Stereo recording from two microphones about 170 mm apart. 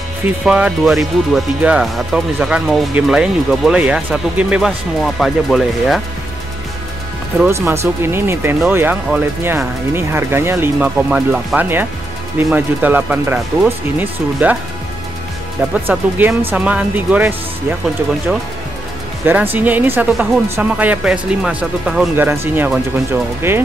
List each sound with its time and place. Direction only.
0.5 s speech: 5° right (ahead or behind)
7.4 s speech: 15° right (ahead or behind)
15.9 s speech: 10° right (ahead or behind)
19.2 s speech: 10° right (ahead or behind)